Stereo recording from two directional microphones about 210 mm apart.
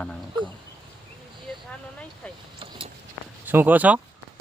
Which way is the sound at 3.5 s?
10° right (ahead or behind).